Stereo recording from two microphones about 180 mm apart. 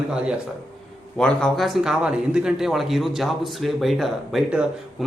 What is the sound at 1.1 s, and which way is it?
Speech, 5° left (ahead or behind).